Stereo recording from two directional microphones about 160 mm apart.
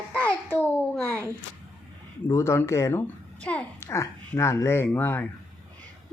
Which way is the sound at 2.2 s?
15° left (ahead or behind).